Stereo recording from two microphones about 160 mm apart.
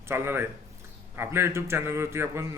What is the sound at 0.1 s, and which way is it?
A man's voice, 15° right (ahead or behind).